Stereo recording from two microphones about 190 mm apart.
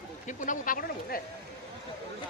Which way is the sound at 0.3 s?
45° left (ahead or behind).